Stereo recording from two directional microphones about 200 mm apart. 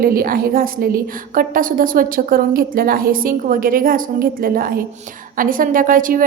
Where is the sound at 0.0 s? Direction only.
45° right (ahead or behind).